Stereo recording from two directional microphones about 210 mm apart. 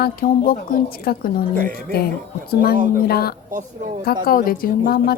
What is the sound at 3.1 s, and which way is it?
A woman's voice, 50° left (ahead or behind).